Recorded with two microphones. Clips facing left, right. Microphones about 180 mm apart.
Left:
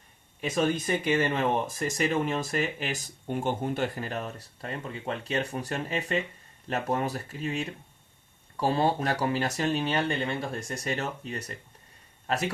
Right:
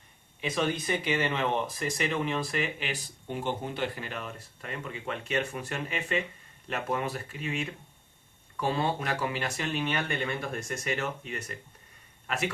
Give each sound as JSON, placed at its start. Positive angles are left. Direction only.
{"t": 0.4, "sound": "speech", "side_deg": 45}